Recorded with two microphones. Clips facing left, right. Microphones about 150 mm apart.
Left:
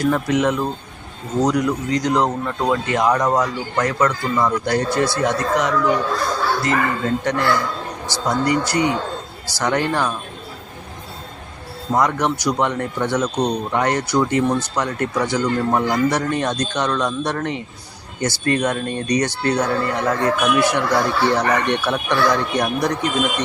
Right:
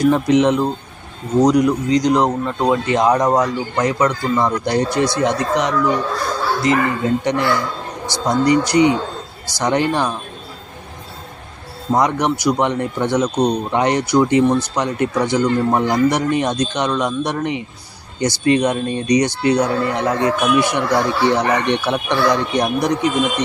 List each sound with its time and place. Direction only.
0.0 s speech: 20° right (ahead or behind)
11.9 s speech: 15° right (ahead or behind)